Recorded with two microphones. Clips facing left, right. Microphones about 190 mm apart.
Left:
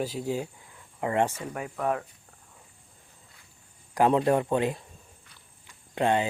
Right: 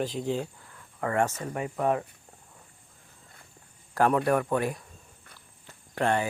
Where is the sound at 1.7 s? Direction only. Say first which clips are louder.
Right 2 dB; 5° right (ahead or behind).